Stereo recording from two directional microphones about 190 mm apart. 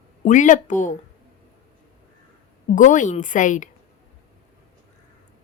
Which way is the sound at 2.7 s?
40° left (ahead or behind).